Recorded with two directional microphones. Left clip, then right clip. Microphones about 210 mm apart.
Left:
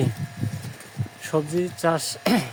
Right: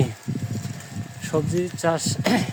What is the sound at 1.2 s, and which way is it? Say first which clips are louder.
Speech: even; centre (ahead or behind).